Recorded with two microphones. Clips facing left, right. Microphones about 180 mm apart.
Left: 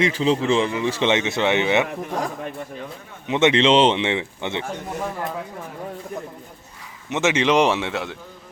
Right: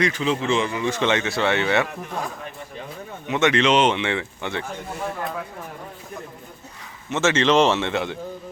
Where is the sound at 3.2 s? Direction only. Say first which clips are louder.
Left 2 dB; 25° left (ahead or behind).